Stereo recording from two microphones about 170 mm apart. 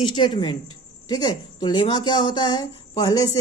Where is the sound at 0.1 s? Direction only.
30° left (ahead or behind).